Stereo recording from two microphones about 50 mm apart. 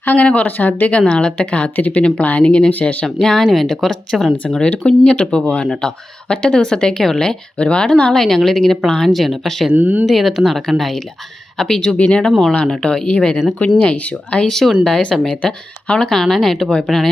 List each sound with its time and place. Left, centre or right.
0.0 s speech: left
0.9 s speech: left
3.4 s speech: centre
4.6 s speech: left; by 9.6 s centre
9.7 s speech: right
10.1 s speech: centre
11.9 s speech: left
12.8 s speech: centre
13.1 s speech: left
14.4 s speech: centre